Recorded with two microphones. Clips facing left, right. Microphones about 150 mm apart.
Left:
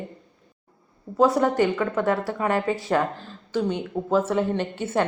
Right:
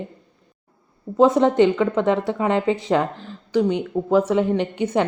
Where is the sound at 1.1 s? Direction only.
20° right (ahead or behind).